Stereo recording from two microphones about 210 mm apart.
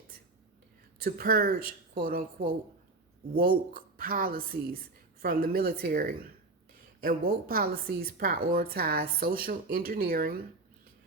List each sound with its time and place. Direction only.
0.9 s a woman's voice: 45° right (ahead or behind)